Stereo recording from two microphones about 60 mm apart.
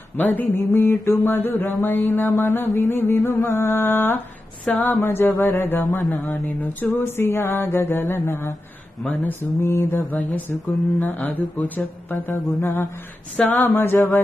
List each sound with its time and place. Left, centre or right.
0.2 s mantra: left
4.6 s a sound: left
5.0 s mantra: left
11.0 s mantra: left
13.4 s mantra: left